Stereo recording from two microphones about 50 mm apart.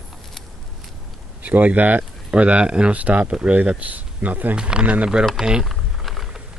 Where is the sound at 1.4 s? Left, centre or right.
Right.